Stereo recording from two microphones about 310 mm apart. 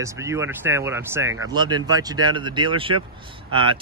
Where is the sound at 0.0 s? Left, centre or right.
Centre.